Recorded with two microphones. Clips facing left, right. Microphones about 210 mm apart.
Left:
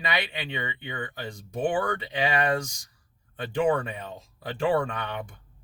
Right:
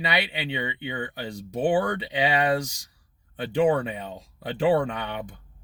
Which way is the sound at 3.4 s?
20° right (ahead or behind).